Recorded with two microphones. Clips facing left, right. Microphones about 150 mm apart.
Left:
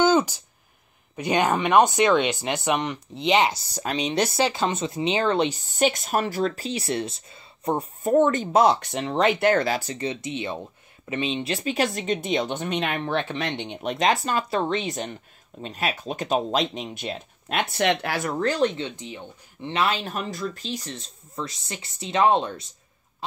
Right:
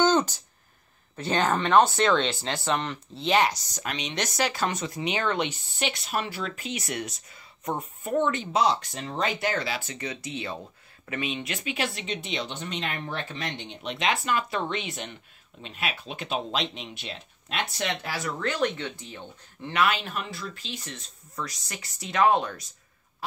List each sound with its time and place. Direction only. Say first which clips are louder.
0.0 s a sound: left 3 dB; 10° left (ahead or behind)
1.1 s speech: left 3 dB; 15° left (ahead or behind); by 13.9 s 60° left (ahead or behind)
13.9 s speech: left 4 dB; 40° left (ahead or behind); by 18.3 s 60° left (ahead or behind)
18.4 s speech: left 5 dB; 35° left (ahead or behind)
18.8 s speech: left 4 dB; 20° left (ahead or behind)